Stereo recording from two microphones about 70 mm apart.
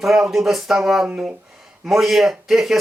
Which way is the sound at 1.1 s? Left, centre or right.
Centre.